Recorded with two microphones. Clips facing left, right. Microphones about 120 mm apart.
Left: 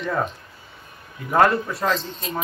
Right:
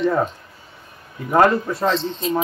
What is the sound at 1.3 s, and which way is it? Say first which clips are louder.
Speech: right 2 dB; 30° right (ahead or behind).